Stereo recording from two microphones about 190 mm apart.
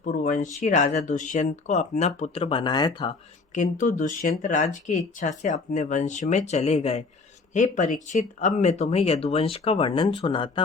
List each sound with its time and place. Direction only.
0.0 s speech: 40° left (ahead or behind); by 3.2 s 25° left (ahead or behind)
3.5 s speech: 40° left (ahead or behind); by 10.6 s 25° left (ahead or behind)